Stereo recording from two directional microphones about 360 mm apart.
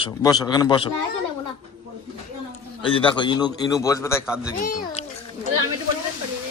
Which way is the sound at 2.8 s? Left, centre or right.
Centre.